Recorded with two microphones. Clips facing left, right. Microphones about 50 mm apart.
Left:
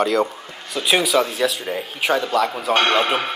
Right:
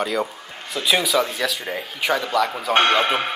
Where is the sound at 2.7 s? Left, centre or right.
Left.